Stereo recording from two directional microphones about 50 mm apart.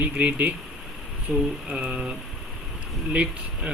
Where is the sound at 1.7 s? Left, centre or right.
Centre.